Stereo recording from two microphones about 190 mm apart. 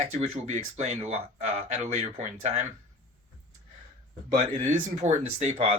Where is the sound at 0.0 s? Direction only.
35° right (ahead or behind).